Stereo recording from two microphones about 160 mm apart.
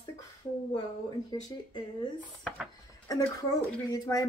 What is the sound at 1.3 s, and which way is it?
Speech, 25° left (ahead or behind).